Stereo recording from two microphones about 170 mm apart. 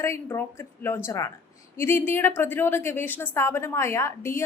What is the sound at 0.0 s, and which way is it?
A woman's voice, 15° left (ahead or behind).